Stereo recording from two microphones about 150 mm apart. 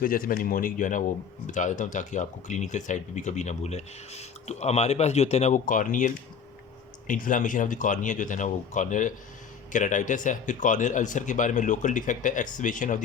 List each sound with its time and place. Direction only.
0.0 s speech: 70° left (ahead or behind)